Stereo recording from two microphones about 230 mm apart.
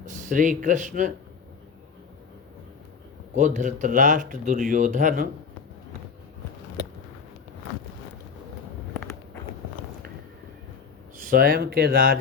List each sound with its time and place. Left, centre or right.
0.0 s speech: right
3.3 s speech: right
9.0 s a sound: centre
11.2 s speech: right